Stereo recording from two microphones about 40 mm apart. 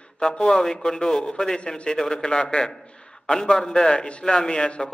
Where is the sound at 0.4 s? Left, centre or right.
Centre; by 4.9 s left.